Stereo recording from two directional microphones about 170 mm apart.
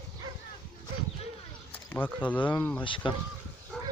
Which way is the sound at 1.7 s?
10° left (ahead or behind).